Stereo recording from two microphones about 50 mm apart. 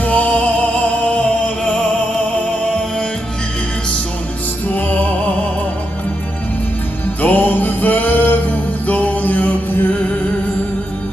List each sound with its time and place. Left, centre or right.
0.0 s music: left
4.7 s music: left
7.2 s music: left